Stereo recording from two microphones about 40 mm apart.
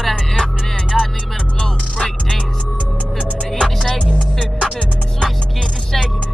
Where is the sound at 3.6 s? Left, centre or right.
Centre.